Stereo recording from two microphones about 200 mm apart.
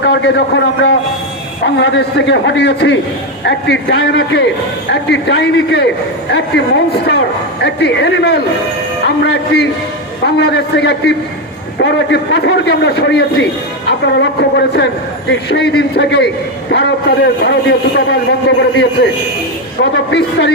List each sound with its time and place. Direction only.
0.0 s a man's voice: 55° left (ahead or behind)